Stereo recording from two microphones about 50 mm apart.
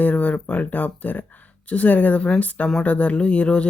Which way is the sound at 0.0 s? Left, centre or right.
Left.